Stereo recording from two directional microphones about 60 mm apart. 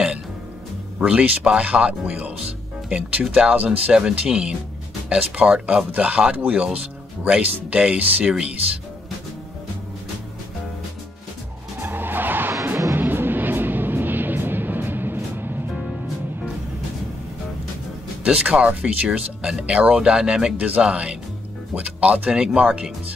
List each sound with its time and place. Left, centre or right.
1.0 s speech: centre
11.8 s skidding: right
12.9 s vehicle: right
18.2 s speech: centre
20.5 s speech: right